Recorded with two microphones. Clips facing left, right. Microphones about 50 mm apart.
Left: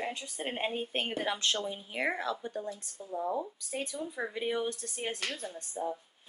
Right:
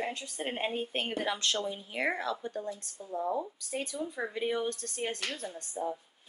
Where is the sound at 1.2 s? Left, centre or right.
Left.